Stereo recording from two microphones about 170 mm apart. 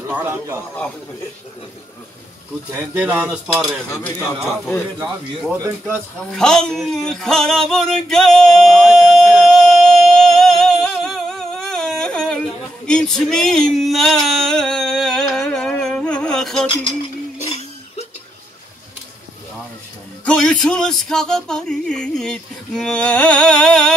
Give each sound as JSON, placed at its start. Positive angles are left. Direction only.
{"t": 0.1, "sound": "cutlery", "side_deg": -10}
{"t": 2.7, "sound": "cutlery", "side_deg": -10}
{"t": 3.9, "sound": "speech", "side_deg": 15}
{"t": 6.3, "sound": "a sound", "side_deg": 5}
{"t": 17.4, "sound": "a sound", "side_deg": 40}
{"t": 20.2, "sound": "music", "side_deg": 5}